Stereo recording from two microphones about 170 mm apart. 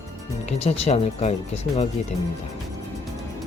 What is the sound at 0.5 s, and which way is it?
Speech, 40° left (ahead or behind).